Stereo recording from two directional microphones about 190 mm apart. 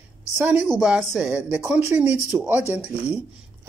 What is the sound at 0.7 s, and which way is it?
Speech, 5° right (ahead or behind).